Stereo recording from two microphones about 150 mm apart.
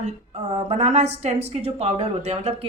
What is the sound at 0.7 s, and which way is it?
A woman's voice, 50° right (ahead or behind).